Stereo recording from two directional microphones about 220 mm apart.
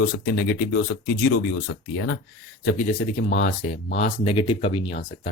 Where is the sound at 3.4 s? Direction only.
35° left (ahead or behind).